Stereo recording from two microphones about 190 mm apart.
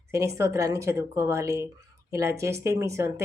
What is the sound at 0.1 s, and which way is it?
Speech, 15° right (ahead or behind).